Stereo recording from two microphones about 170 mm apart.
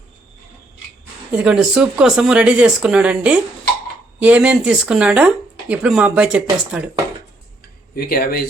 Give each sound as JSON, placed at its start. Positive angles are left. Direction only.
{"t": 1.4, "sound": "speech", "side_deg": -5}
{"t": 7.9, "sound": "speech", "side_deg": 60}